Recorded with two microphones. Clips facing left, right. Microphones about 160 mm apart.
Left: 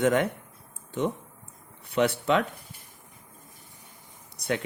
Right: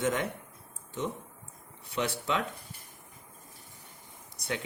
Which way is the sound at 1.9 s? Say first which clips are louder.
Left 8 dB; 60° left (ahead or behind).